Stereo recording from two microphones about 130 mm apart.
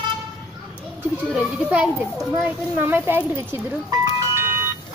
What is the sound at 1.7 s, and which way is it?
Speech, 10° right (ahead or behind).